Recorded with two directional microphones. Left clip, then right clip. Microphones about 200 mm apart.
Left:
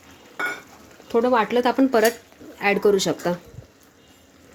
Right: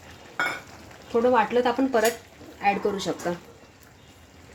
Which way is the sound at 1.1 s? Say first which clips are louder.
Left 2 dB; 55° left (ahead or behind).